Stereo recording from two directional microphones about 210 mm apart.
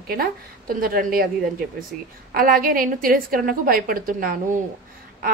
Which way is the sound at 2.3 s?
45° right (ahead or behind).